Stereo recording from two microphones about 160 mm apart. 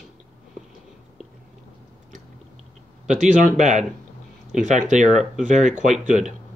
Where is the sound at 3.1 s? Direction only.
50° right (ahead or behind).